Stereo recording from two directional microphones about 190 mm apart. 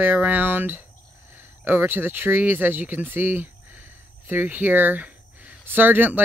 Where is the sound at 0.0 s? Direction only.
10° right (ahead or behind).